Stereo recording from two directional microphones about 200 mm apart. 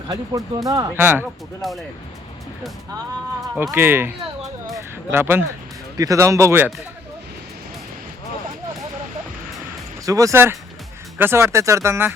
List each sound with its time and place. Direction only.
0.1 s speech: 15° right (ahead or behind)
1.6 s speech: centre (ahead or behind)
3.5 s speech: 5° right (ahead or behind)
4.7 s a sound: 10° right (ahead or behind)
6.0 s speech: 15° right (ahead or behind)
10.1 s speech: 15° right (ahead or behind)